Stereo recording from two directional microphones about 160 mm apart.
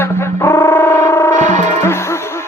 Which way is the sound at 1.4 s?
50° right (ahead or behind).